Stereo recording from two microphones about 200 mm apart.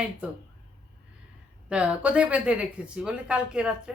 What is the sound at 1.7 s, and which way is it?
Speech, 5° right (ahead or behind).